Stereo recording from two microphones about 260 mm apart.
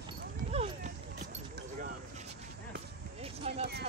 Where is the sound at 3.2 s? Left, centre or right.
Right.